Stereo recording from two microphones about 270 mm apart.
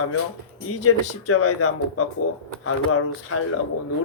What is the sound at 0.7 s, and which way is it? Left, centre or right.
Speech, left.